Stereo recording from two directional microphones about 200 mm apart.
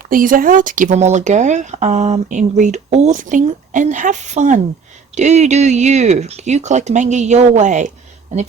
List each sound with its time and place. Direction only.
0.1 s speech: 45° right (ahead or behind)